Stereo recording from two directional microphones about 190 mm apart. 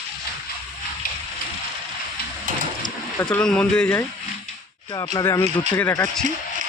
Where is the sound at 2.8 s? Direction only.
25° left (ahead or behind).